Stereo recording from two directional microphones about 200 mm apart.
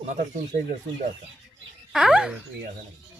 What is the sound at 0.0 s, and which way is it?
Speech, 40° right (ahead or behind).